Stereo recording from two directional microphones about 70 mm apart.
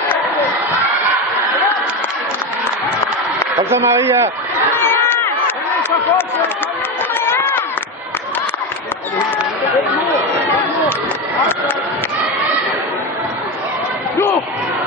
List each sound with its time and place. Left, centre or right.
3.7 s a man's voice: right
5.8 s a sound: left
7.2 s run: left